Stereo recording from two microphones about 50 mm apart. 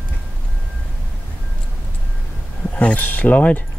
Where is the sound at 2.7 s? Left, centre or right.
Left.